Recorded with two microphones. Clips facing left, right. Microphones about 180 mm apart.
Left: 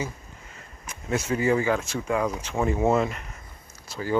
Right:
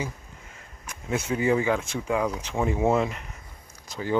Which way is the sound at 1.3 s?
5° right (ahead or behind).